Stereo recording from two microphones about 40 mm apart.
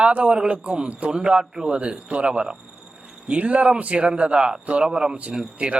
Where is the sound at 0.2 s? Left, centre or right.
Right.